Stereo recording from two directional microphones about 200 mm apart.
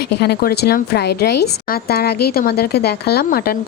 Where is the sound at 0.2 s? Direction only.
55° left (ahead or behind).